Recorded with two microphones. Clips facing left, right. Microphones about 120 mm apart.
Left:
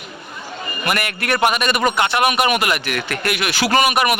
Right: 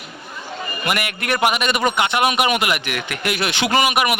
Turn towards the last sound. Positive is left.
turn(degrees=-15)  # may be behind; listen again after turning